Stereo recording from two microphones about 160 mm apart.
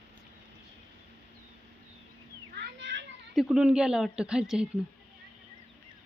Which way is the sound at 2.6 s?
90° right.